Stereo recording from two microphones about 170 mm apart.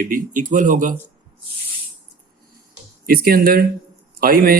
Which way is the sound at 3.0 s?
60° right (ahead or behind).